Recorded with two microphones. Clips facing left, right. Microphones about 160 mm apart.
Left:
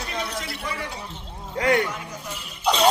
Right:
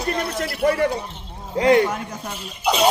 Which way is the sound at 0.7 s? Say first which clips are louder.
Right 17 dB; 60° right (ahead or behind).